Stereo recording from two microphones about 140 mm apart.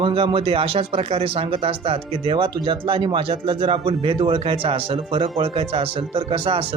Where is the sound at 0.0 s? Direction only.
40° right (ahead or behind).